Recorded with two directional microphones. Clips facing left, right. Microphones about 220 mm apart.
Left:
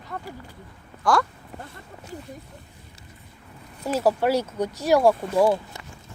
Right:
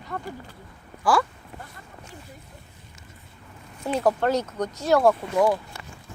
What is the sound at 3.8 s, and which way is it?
Speech, 5° left (ahead or behind).